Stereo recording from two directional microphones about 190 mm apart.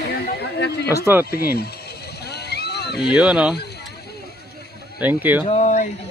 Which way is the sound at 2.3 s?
60° left (ahead or behind).